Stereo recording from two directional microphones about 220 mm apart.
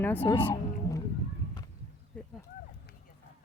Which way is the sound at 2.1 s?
5° left (ahead or behind).